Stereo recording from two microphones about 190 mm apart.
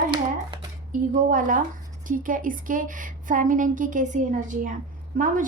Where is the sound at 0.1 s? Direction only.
25° right (ahead or behind).